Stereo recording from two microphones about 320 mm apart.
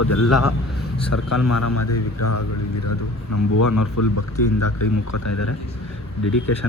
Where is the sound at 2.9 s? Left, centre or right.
Left.